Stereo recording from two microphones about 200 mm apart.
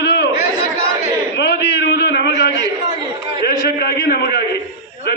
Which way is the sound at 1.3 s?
60° left (ahead or behind).